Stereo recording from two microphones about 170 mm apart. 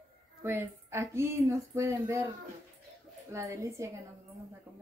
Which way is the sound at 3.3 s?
15° right (ahead or behind).